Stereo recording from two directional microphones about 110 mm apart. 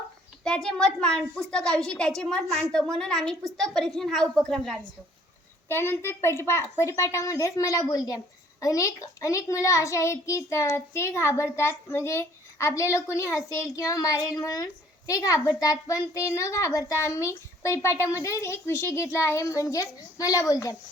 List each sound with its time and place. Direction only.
0.4 s a woman's voice: 5° left (ahead or behind)
5.6 s a child's voice: 20° left (ahead or behind)